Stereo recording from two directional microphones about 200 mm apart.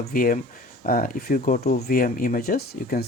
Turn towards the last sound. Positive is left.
turn(degrees=50)  # may be behind; listen again after turning